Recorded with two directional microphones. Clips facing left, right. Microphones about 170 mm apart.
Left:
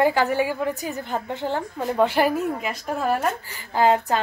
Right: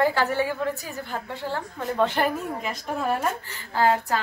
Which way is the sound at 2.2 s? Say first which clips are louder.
Left 4 dB; 5° left (ahead or behind).